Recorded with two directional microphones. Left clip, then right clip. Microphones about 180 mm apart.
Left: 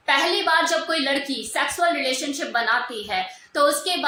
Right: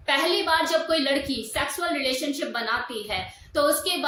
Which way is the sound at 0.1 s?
15° right (ahead or behind).